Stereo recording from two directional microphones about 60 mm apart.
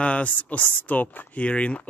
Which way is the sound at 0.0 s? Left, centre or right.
Left.